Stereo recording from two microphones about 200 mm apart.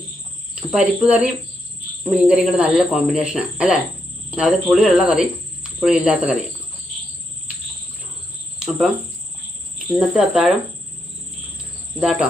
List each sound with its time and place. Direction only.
0.7 s speech: 5° right (ahead or behind)
8.5 s cricket: 5° right (ahead or behind)
10.2 s speech: 5° right (ahead or behind)
11.9 s speech: 5° right (ahead or behind)